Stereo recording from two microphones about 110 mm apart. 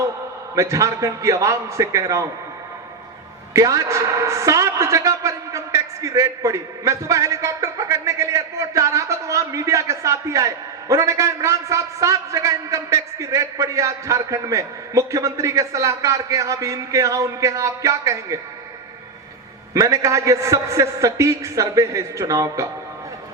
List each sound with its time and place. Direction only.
0.5 s a man's voice: 30° right (ahead or behind)
3.5 s a man's voice: 30° right (ahead or behind)
19.7 s a man's voice: 30° right (ahead or behind)